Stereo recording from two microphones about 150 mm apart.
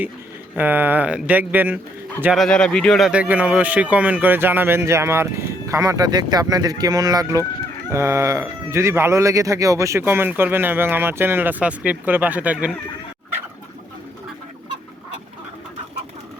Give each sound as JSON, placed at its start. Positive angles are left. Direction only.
{"t": 0.5, "sound": "speech", "side_deg": -10}
{"t": 2.3, "sound": "speech", "side_deg": 5}
{"t": 3.1, "sound": "speech", "side_deg": -10}